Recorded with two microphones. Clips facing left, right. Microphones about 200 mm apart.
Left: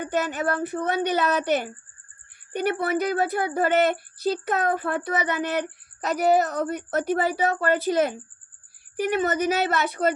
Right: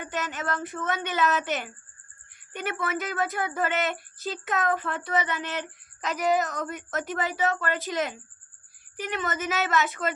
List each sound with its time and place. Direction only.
0.0 s speech: 40° left (ahead or behind)